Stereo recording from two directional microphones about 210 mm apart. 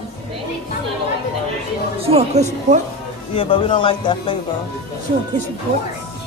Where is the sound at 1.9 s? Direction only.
30° right (ahead or behind).